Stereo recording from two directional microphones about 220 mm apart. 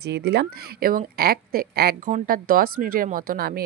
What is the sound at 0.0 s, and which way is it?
Speech, 50° right (ahead or behind).